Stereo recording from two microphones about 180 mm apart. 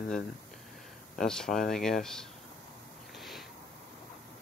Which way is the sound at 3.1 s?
Centre (ahead or behind).